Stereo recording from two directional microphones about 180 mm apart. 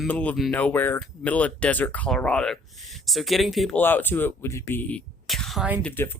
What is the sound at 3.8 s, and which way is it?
Speech, 10° left (ahead or behind).